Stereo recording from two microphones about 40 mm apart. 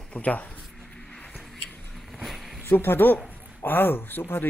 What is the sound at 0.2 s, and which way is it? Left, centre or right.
Speech, left.